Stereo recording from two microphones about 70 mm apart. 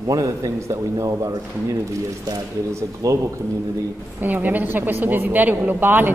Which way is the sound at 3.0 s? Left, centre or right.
Right.